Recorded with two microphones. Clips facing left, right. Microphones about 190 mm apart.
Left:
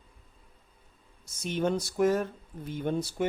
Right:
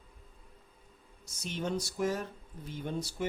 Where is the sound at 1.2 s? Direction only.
55° left (ahead or behind).